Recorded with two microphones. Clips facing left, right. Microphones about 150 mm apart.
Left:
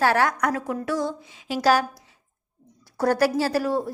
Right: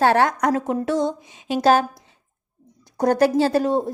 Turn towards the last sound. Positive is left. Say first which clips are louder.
# right 4 dB
turn(degrees=-25)  # may be behind; listen again after turning